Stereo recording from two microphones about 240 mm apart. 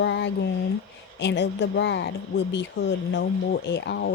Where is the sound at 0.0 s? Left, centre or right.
Left.